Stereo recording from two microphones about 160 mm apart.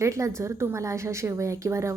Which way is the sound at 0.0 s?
20° right (ahead or behind).